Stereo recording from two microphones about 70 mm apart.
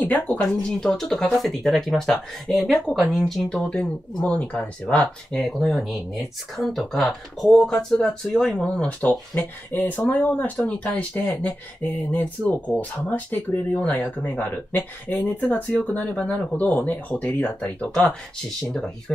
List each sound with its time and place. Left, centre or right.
0.0 s speech: left
0.4 s speech: centre
4.2 s speech: centre
5.5 s speech: centre
8.7 s speech: left; by 19.1 s centre